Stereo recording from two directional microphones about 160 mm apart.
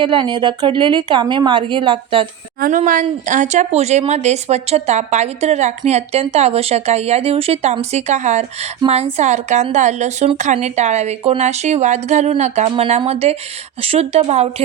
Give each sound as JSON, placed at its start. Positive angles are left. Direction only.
{"t": 0.0, "sound": "a woman's voice", "side_deg": -30}
{"t": 2.6, "sound": "a woman's voice", "side_deg": -55}